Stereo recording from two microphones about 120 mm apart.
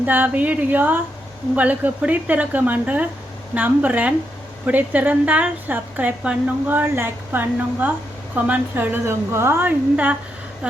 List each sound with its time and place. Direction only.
0.0 s a woman's voice: 15° right (ahead or behind)